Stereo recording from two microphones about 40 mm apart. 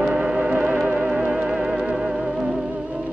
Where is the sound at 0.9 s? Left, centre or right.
Right.